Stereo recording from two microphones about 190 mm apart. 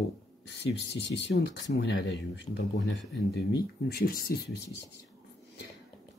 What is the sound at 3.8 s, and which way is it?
Speech, 55° left (ahead or behind).